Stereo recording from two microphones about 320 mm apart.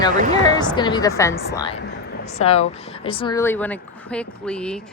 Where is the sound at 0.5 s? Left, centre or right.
Centre.